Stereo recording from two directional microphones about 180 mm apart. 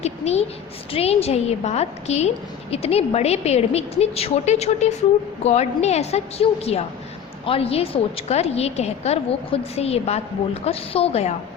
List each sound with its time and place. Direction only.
0.0 s a woman's voice: 35° left (ahead or behind)